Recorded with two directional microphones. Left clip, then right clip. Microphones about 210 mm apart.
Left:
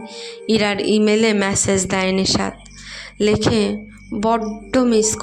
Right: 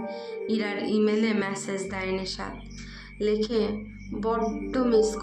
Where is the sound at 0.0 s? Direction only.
50° left (ahead or behind).